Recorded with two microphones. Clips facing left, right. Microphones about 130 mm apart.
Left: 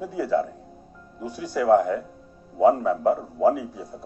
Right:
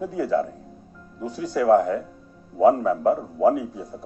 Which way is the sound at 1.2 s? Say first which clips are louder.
Right 1 dB; 10° left (ahead or behind).